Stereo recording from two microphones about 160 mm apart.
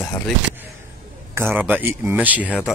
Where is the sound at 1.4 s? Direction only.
10° right (ahead or behind).